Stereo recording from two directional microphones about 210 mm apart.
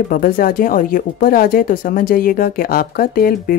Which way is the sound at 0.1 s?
40° left (ahead or behind).